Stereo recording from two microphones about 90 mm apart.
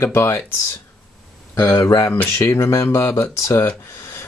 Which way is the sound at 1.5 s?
25° left (ahead or behind).